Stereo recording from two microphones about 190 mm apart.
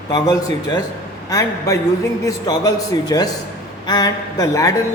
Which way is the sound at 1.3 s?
15° left (ahead or behind).